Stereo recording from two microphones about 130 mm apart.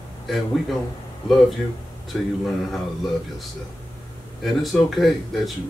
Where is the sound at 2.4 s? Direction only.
Centre (ahead or behind).